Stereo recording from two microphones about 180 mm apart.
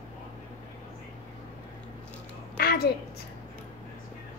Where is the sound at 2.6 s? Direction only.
60° left (ahead or behind).